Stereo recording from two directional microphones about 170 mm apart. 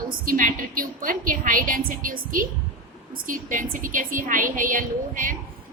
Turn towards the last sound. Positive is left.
turn(degrees=-50)  # may be behind; listen again after turning